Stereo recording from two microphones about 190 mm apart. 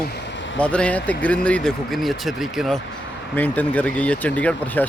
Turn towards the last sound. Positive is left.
turn(degrees=10)  # may be behind; listen again after turning